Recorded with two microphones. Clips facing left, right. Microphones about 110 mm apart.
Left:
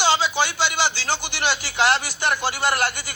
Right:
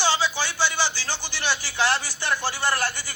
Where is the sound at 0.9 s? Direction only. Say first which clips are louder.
Left 6 dB; 65° left (ahead or behind).